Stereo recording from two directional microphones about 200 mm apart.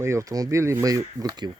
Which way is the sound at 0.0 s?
15° right (ahead or behind).